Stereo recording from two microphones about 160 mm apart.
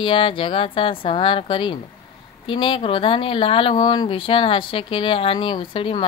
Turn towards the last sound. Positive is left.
turn(degrees=30)  # may be behind; listen again after turning